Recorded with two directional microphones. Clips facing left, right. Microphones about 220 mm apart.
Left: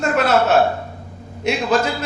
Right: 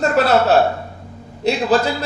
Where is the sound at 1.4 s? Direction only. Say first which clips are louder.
Right 2 dB; 35° right (ahead or behind).